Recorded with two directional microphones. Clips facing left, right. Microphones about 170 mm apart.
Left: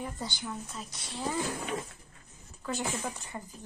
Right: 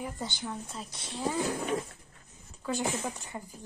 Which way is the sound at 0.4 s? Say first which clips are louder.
Right 1 dB; 30° right (ahead or behind).